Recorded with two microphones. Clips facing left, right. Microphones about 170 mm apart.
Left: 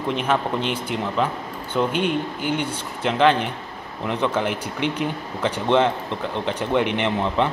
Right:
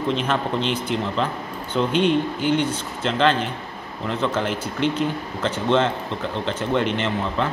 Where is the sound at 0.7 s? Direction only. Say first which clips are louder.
Right 1 dB; 10° left (ahead or behind).